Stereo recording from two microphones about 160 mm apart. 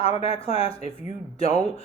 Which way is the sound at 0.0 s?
40° left (ahead or behind).